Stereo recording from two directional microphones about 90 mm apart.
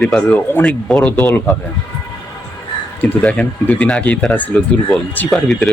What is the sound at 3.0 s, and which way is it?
Speech, 15° left (ahead or behind).